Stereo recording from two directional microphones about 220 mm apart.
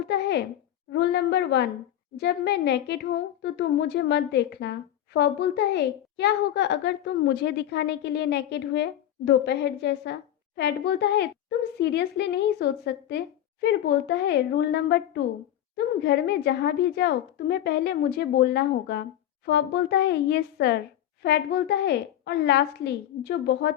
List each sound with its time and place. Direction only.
0.0 s a woman's voice: 50° left (ahead or behind)